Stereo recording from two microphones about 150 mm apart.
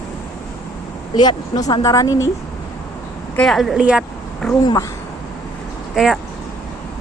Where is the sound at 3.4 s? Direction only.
Centre (ahead or behind).